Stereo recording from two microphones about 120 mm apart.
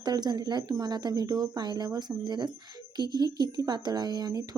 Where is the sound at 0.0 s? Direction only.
35° right (ahead or behind).